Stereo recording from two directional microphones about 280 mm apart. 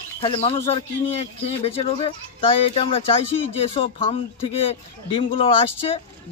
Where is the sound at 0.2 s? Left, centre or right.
Centre.